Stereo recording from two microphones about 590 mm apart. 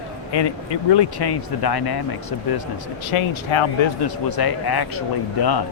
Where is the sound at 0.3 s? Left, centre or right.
Left.